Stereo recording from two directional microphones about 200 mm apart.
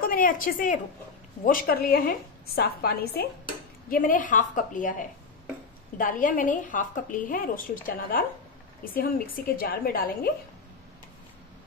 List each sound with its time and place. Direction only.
0.0 s a woman's voice: 45° left (ahead or behind)